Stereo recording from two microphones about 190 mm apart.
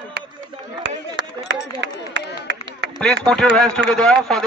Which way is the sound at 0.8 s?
70° right (ahead or behind).